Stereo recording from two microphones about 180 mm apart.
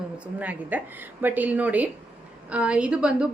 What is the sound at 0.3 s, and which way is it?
A woman's voice, 10° right (ahead or behind).